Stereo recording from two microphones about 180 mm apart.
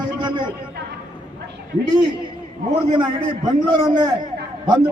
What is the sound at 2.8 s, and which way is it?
A man's voice, 25° right (ahead or behind).